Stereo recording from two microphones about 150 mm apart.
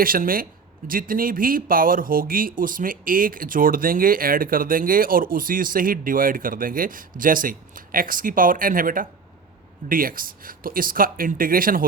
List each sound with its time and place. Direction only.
0.0 s speech: 70° right (ahead or behind)